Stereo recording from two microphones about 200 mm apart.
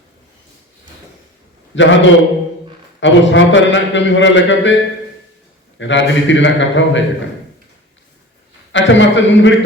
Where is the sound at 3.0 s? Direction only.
65° left (ahead or behind).